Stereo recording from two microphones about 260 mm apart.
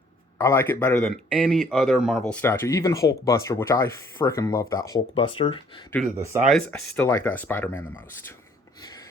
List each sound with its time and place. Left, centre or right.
0.3 s a man's voice: centre
6.5 s a man's voice: centre